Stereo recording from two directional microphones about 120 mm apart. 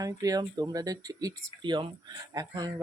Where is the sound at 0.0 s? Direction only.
30° right (ahead or behind).